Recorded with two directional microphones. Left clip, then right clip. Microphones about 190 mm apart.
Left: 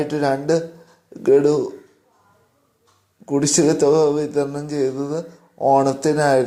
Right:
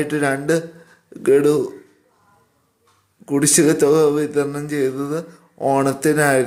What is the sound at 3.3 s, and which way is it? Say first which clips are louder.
Speech: right 1 dB; 15° right (ahead or behind).